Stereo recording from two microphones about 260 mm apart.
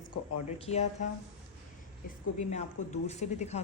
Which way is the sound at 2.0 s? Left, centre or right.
Left.